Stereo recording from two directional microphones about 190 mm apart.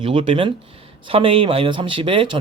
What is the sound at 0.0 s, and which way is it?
Speech, 30° right (ahead or behind).